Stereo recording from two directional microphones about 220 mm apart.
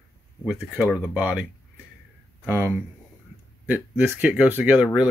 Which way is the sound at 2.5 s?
10° right (ahead or behind).